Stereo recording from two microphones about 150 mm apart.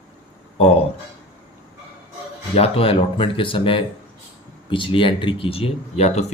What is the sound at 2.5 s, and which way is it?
Speech, 40° left (ahead or behind).